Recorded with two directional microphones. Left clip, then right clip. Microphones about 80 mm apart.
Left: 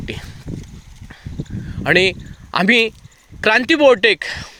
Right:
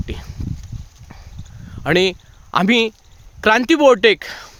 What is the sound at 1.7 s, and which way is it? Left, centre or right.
Speech, right.